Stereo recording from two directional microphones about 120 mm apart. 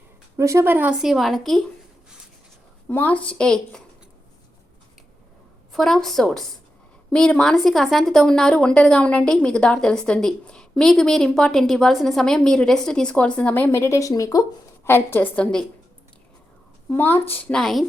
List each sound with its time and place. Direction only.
0.3 s speech: 25° right (ahead or behind)
1.0 s a woman's voice: centre (ahead or behind)
2.9 s a woman's voice: 15° left (ahead or behind)
5.7 s a woman's voice: centre (ahead or behind); by 14.4 s 30° left (ahead or behind)
14.8 s a woman's voice: 20° left (ahead or behind)
16.9 s a woman's voice: 15° left (ahead or behind)
17.5 s a woman's voice: 5° left (ahead or behind)